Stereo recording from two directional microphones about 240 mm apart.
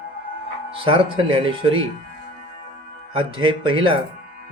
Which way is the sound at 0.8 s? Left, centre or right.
Right.